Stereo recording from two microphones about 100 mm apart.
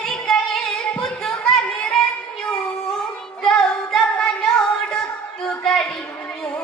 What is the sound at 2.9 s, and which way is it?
Child singing, 5° left (ahead or behind).